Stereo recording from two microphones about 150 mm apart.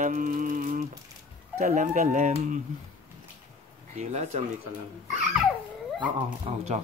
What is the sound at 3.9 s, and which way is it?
Speech, 50° right (ahead or behind).